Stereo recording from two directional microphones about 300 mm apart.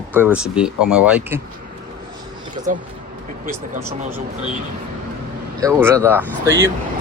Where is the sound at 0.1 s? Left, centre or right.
Centre.